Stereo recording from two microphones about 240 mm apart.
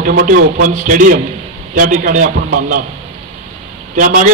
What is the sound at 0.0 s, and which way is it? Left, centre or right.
A man's voice, right.